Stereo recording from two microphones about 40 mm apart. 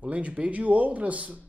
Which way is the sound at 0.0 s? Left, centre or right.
Right.